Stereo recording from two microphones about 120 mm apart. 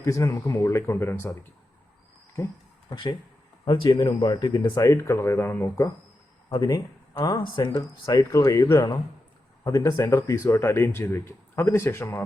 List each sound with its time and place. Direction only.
0.0 s speech: 25° left (ahead or behind)
2.9 s speech: 40° left (ahead or behind)
4.8 s speech: 25° left (ahead or behind)
6.5 s speech: 30° left (ahead or behind)